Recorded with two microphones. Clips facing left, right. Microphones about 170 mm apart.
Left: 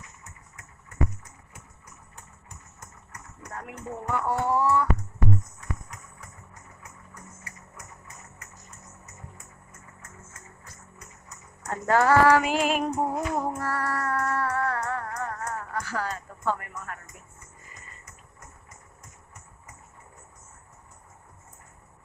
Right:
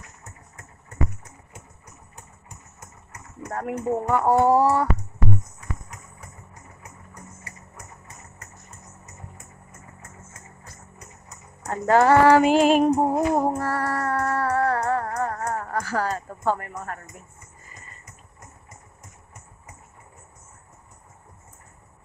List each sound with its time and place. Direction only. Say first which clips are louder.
3.4 s speech: right 11 dB; 50° right (ahead or behind)
5.6 s a sound: right 1 dB; 5° right (ahead or behind)
11.6 s female singing: right 4 dB; 30° right (ahead or behind)